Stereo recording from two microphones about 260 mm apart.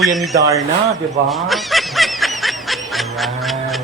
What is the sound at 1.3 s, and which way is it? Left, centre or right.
Honk, centre.